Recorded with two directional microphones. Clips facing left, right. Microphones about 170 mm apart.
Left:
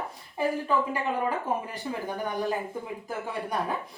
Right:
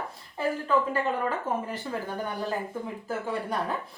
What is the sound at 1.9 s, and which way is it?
Speech, 15° left (ahead or behind).